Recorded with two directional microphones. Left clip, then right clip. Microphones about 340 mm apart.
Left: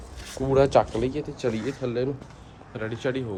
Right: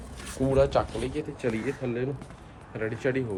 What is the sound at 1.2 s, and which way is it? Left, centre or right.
Speech, centre.